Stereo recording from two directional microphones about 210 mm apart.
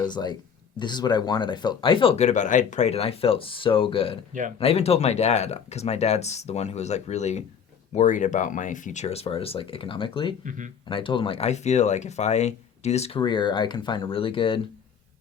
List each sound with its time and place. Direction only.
0.0 s speech: 20° left (ahead or behind)